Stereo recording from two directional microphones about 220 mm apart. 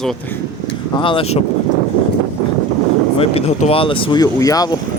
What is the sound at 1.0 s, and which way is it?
Speech, 25° left (ahead or behind).